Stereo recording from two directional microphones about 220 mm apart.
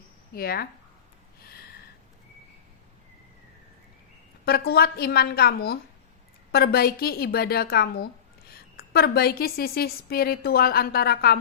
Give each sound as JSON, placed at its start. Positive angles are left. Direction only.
{"t": 0.3, "sound": "a woman's voice", "side_deg": 45}
{"t": 1.4, "sound": "a sound", "side_deg": 45}
{"t": 4.4, "sound": "a woman's voice", "side_deg": 45}